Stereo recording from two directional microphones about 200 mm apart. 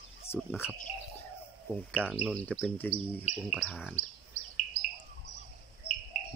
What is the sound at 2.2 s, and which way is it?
Speech, 5° left (ahead or behind).